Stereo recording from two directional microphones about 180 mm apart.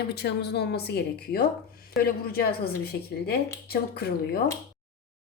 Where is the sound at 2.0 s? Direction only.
60° left (ahead or behind).